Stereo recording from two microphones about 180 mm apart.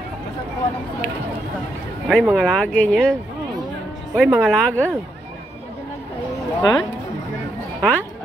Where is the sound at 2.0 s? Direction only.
5° left (ahead or behind).